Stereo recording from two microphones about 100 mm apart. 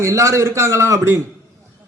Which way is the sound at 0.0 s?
30° right (ahead or behind).